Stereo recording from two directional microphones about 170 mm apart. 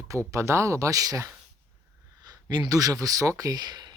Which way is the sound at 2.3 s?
25° right (ahead or behind).